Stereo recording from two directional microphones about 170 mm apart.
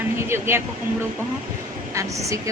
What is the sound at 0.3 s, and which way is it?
Speech, 15° right (ahead or behind).